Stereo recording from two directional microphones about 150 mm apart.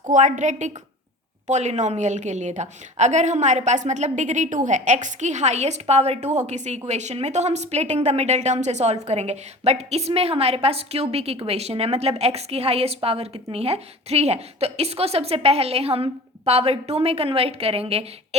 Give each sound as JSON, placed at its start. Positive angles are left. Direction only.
{"t": 0.0, "sound": "a woman's voice", "side_deg": -55}